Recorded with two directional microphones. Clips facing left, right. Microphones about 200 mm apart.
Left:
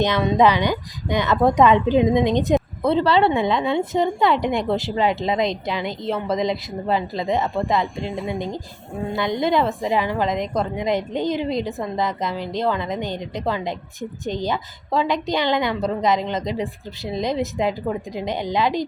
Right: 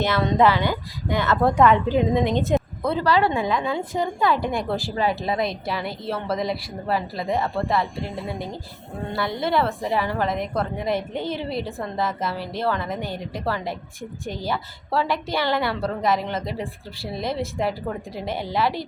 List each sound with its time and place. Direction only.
0.0 s a woman's voice: 20° left (ahead or behind)